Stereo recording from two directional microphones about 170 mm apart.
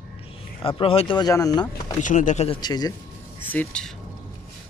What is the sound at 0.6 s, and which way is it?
Speech, 30° left (ahead or behind).